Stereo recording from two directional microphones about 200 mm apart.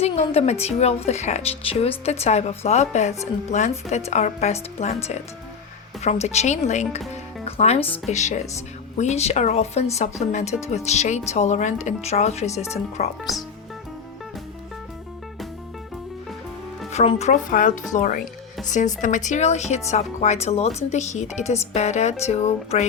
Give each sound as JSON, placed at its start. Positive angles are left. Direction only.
{"t": 0.0, "sound": "speech", "side_deg": 30}
{"t": 6.0, "sound": "speech", "side_deg": 35}
{"t": 16.9, "sound": "speech", "side_deg": 30}